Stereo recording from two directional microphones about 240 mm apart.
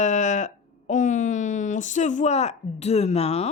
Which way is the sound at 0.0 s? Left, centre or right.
Left.